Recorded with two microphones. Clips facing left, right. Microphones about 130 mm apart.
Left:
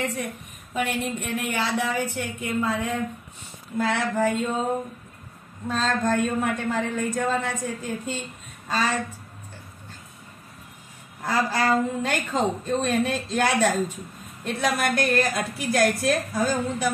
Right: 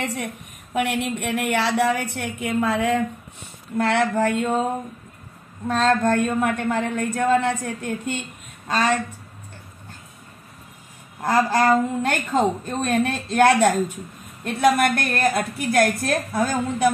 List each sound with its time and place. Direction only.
0.0 s a woman's voice: 90° right
0.7 s a woman's voice: 75° right (ahead or behind)
3.7 s speech: 70° right (ahead or behind)
5.7 s a woman's voice: 65° right (ahead or behind)
11.2 s a woman's voice: 50° right (ahead or behind)